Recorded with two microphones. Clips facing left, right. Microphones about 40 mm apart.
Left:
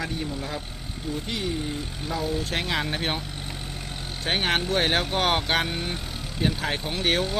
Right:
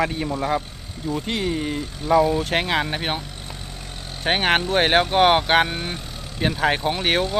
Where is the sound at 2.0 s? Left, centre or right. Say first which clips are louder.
Right 11 dB; centre.